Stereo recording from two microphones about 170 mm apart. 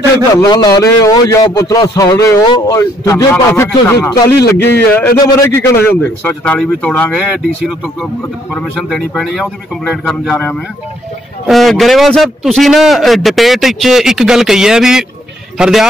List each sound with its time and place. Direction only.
0.4 s a man's voice: 20° left (ahead or behind); by 15.9 s 5° right (ahead or behind)